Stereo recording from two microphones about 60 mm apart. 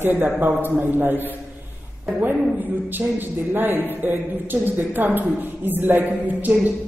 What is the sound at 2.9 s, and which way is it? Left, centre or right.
A woman's voice, right.